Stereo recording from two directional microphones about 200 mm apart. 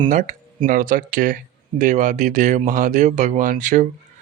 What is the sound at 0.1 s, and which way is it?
Speech, 40° right (ahead or behind).